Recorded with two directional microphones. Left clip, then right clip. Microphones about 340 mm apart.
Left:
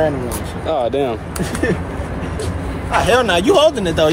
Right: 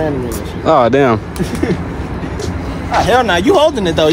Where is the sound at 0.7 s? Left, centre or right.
Right.